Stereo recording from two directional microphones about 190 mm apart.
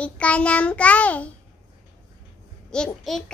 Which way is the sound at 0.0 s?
5° left (ahead or behind).